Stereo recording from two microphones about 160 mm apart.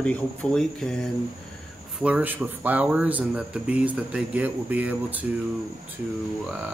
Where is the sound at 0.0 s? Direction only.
5° left (ahead or behind).